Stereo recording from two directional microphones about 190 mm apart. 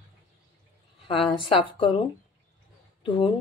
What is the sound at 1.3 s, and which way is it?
Speech, 25° left (ahead or behind).